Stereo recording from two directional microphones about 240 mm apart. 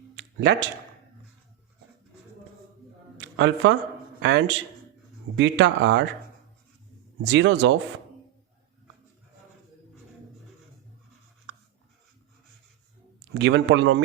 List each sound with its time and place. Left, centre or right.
0.2 s a sound: right
3.2 s music: right
4.2 s speech: right
7.2 s speech: right
13.3 s speech: right